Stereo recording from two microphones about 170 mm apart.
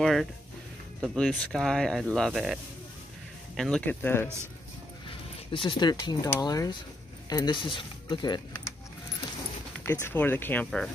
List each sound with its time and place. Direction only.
0.0 s speech: centre (ahead or behind)
5.5 s speech: 30° left (ahead or behind)
9.8 s speech: 15° left (ahead or behind)